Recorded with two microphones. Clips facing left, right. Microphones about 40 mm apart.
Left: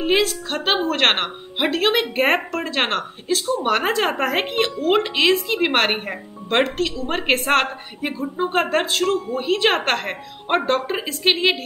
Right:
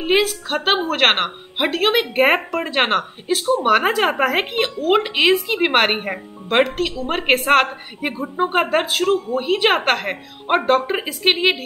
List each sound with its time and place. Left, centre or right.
0.0 s speech: centre
5.0 s speech: centre
8.1 s speech: right
8.5 s speech: centre